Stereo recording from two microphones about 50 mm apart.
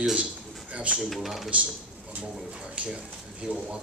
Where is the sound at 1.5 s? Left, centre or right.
Right.